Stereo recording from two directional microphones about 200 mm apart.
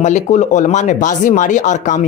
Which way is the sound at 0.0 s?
35° left (ahead or behind).